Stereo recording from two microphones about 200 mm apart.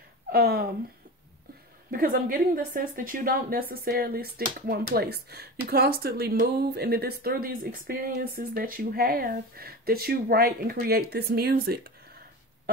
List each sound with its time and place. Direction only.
0.3 s speech: 50° right (ahead or behind)
1.9 s speech: 45° right (ahead or behind)